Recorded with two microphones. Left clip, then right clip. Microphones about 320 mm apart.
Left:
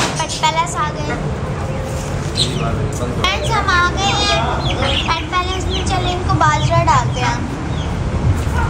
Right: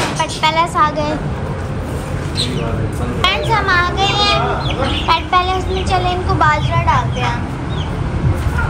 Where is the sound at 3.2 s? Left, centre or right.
Centre.